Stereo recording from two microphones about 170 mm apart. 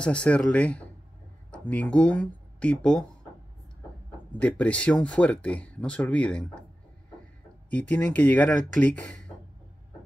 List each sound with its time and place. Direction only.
0.0 s speech: 5° left (ahead or behind)
4.3 s speech: 10° left (ahead or behind)
7.9 s speech: 10° left (ahead or behind)